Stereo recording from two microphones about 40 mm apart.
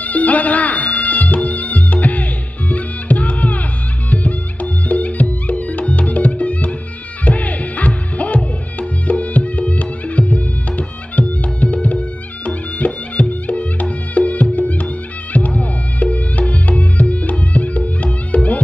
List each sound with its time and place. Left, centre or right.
0.0 s music: left